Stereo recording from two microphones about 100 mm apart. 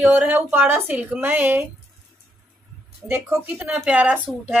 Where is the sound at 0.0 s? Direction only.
15° right (ahead or behind).